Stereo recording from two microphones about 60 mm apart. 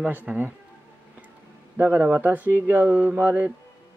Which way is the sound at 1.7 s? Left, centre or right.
Right.